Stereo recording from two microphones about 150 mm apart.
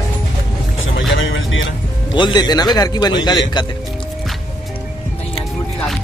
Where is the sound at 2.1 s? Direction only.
30° left (ahead or behind).